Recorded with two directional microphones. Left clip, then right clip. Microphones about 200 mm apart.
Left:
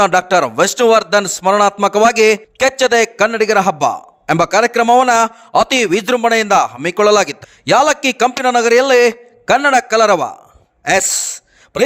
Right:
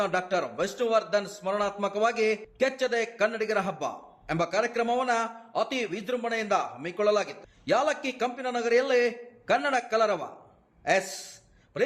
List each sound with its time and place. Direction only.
0.0 s a man's voice: 55° left (ahead or behind)